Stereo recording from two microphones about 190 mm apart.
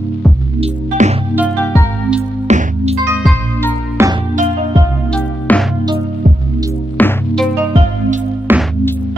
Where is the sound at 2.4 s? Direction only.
35° right (ahead or behind).